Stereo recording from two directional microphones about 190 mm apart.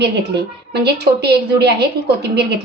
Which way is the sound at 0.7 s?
60° right (ahead or behind).